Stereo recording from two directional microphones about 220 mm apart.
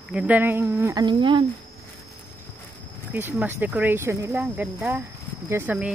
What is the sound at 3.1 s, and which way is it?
Speech, 10° right (ahead or behind).